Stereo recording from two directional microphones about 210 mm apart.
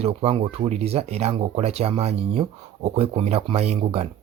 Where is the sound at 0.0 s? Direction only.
30° right (ahead or behind).